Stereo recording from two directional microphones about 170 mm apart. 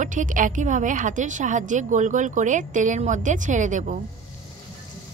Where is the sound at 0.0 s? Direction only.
50° right (ahead or behind).